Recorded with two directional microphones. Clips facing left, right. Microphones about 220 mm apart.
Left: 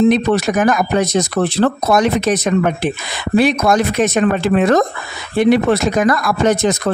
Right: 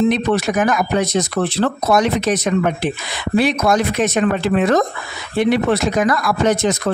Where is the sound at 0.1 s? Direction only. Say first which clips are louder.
Left 3 dB; 40° left (ahead or behind).